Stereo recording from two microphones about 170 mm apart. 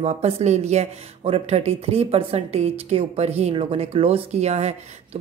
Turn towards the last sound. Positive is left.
turn(degrees=-40)  # may be behind; listen again after turning